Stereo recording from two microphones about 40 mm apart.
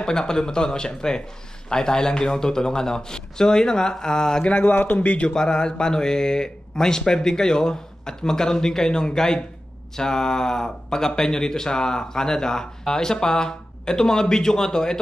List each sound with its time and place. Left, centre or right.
0.0 s speech: centre
4.5 s a man's voice: left
5.3 s speech: centre